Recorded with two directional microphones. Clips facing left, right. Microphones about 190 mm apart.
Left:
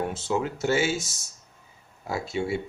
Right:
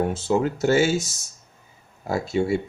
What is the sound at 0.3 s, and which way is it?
Speech, 35° right (ahead or behind).